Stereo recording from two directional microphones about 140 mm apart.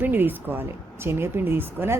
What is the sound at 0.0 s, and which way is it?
A woman's voice, 15° right (ahead or behind).